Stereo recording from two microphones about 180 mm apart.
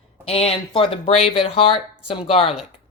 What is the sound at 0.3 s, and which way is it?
Speech, 35° left (ahead or behind).